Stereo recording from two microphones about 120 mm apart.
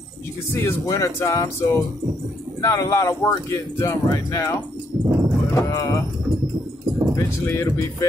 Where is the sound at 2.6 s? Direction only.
25° left (ahead or behind).